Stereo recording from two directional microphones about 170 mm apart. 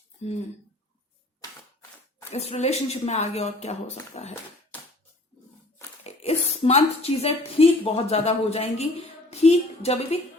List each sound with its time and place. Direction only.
2.3 s speech: 40° left (ahead or behind)
6.0 s a woman's voice: 40° left (ahead or behind)